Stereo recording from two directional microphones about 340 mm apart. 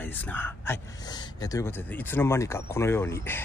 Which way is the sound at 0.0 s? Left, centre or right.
Centre.